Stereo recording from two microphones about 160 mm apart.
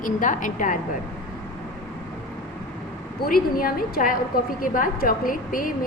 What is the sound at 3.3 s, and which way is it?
A woman's voice, 65° left (ahead or behind).